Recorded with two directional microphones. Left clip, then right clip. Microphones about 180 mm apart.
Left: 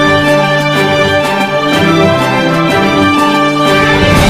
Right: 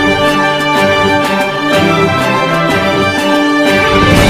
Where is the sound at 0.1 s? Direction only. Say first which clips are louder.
Left 2 dB; centre (ahead or behind).